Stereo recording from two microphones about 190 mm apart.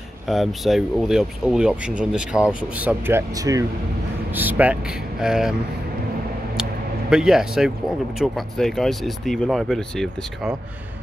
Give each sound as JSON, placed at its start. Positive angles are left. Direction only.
{"t": 0.3, "sound": "speech", "side_deg": 0}
{"t": 6.5, "sound": "a sound", "side_deg": -5}
{"t": 8.2, "sound": "speech", "side_deg": 0}